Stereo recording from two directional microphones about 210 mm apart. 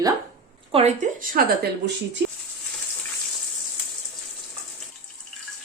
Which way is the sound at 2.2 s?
50° right (ahead or behind).